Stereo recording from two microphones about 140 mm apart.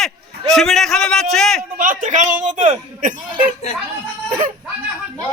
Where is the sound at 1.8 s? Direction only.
70° right (ahead or behind).